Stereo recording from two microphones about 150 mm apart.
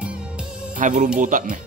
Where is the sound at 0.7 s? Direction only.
60° right (ahead or behind).